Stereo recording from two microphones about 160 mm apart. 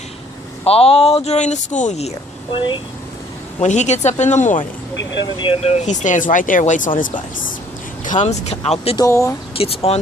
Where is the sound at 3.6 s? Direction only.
50° left (ahead or behind).